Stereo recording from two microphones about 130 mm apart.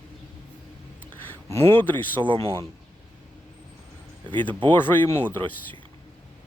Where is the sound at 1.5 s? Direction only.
15° left (ahead or behind).